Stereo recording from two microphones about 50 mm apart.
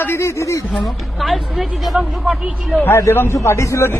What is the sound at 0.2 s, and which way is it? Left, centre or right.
Speech, left.